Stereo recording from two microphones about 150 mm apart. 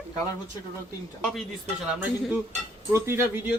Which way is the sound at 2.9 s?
15° right (ahead or behind).